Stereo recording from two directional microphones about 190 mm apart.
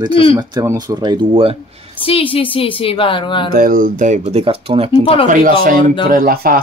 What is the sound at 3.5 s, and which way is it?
Speech, 50° right (ahead or behind).